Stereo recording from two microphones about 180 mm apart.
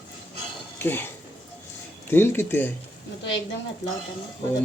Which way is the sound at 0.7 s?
10° left (ahead or behind).